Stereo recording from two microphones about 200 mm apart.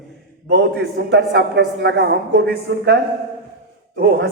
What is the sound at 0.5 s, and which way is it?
A man's voice, 55° right (ahead or behind).